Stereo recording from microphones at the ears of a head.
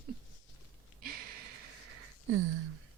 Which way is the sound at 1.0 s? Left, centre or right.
Right.